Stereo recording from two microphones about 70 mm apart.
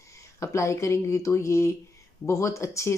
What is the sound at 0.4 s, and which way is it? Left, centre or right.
Speech, left.